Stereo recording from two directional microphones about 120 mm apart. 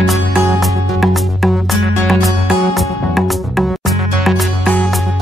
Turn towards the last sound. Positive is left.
turn(degrees=0)  # may be behind; listen again after turning